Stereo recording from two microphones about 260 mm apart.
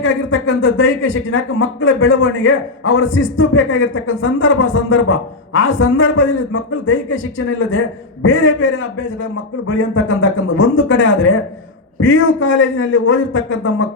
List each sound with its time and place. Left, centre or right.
0.0 s a man's voice: left